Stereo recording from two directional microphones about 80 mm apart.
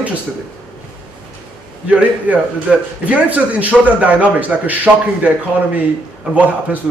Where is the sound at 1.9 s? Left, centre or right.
Centre.